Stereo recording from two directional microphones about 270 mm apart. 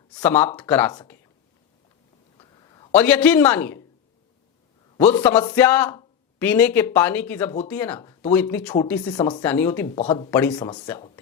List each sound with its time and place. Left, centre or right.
0.2 s speech: centre
2.4 s a sound: centre
3.0 s speech: centre
5.2 s speech: centre
9.9 s speech: centre